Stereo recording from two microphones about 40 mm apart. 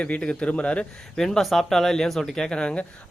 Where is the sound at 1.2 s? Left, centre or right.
Centre.